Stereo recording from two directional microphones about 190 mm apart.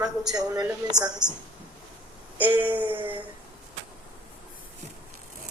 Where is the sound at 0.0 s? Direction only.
5° right (ahead or behind).